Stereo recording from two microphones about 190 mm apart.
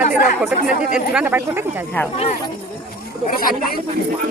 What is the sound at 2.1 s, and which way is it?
Speech, 35° left (ahead or behind).